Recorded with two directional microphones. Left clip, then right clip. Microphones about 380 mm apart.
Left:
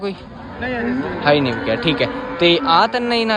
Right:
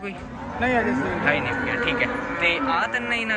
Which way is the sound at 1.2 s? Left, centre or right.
Centre.